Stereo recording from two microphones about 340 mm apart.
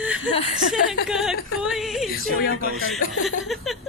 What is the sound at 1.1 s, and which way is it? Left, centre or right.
A woman's voice, centre.